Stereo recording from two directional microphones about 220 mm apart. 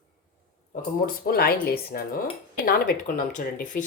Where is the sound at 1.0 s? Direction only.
45° left (ahead or behind).